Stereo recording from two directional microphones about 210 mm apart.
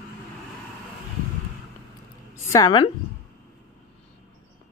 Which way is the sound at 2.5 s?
20° left (ahead or behind).